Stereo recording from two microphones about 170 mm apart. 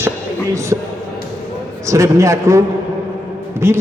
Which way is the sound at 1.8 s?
20° right (ahead or behind).